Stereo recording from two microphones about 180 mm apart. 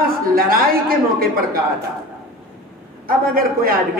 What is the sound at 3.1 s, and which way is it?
Speech, 55° right (ahead or behind).